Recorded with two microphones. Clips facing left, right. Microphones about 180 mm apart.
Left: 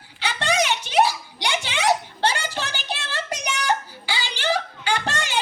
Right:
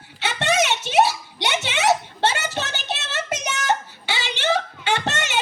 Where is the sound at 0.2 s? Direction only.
25° right (ahead or behind).